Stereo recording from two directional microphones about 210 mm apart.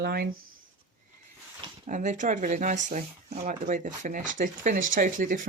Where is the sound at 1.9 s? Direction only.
35° right (ahead or behind).